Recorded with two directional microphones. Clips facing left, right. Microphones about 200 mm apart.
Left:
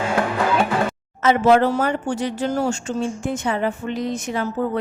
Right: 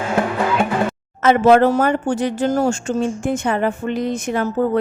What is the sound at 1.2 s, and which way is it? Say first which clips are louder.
Speech: right 3 dB; 55° right (ahead or behind).